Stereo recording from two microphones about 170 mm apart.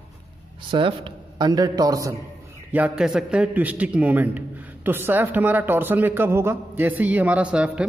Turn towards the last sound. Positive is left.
turn(degrees=-5)  # may be behind; listen again after turning